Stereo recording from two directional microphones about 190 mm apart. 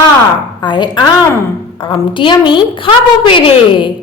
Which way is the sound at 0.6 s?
25° left (ahead or behind).